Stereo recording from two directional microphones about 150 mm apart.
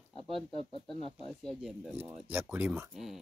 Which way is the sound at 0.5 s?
35° right (ahead or behind).